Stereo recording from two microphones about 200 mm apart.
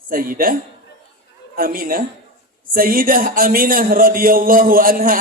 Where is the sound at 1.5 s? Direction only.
45° right (ahead or behind).